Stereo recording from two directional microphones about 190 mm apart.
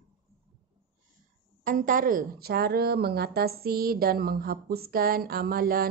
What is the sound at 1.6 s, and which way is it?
A woman's voice, 45° right (ahead or behind).